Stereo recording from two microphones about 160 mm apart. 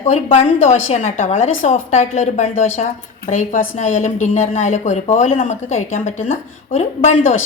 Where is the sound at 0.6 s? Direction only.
45° left (ahead or behind).